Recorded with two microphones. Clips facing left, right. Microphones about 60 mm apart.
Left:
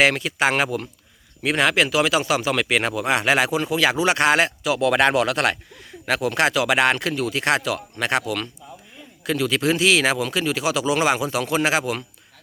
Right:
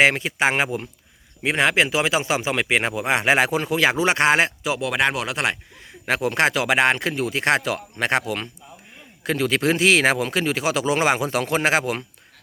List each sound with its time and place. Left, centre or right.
0.0 s speech: right
4.8 s speech: centre
6.1 s speech: right